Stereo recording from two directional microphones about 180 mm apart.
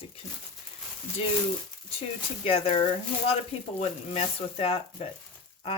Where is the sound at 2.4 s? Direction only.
35° left (ahead or behind).